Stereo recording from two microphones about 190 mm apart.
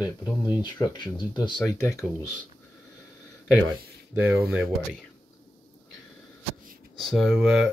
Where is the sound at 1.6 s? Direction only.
10° left (ahead or behind).